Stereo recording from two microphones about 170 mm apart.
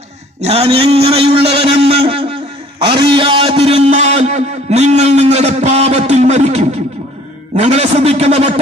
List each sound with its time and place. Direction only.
0.4 s a man's voice: 40° right (ahead or behind)